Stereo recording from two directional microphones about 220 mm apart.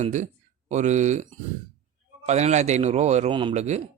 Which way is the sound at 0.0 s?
35° right (ahead or behind).